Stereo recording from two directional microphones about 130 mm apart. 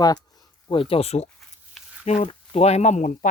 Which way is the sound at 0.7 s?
45° left (ahead or behind).